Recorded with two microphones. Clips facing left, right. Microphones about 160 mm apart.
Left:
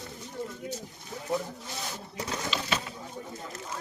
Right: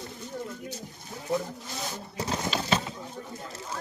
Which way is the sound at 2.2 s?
35° right (ahead or behind).